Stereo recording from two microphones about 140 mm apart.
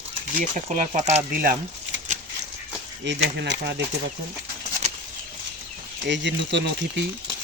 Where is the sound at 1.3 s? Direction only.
90° right.